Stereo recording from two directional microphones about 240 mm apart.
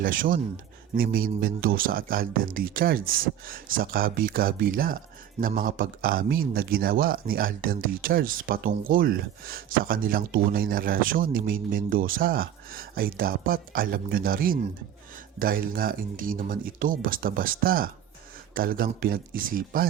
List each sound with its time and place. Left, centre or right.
0.0 s a man's voice: right